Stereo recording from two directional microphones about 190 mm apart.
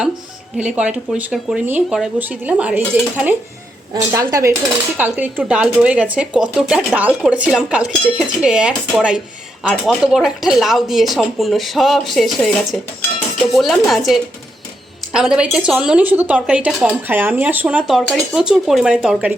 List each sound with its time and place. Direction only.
0.5 s speech: 5° right (ahead or behind)